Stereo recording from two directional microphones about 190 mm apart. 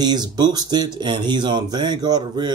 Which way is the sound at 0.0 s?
20° right (ahead or behind).